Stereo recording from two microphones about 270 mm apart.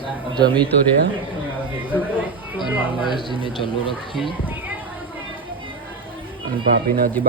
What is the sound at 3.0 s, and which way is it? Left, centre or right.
Speech, centre.